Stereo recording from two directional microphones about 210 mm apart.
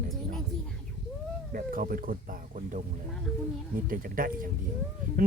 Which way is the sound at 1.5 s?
40° right (ahead or behind).